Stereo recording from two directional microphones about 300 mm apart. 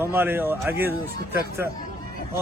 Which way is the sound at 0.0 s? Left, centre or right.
Centre.